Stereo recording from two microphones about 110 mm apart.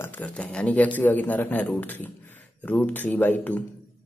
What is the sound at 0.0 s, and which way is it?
Speech, 15° left (ahead or behind).